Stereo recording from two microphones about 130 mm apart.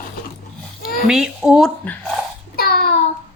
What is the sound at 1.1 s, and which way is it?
Speech, 5° right (ahead or behind).